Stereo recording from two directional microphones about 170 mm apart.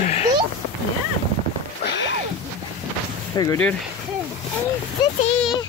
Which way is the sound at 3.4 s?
20° left (ahead or behind).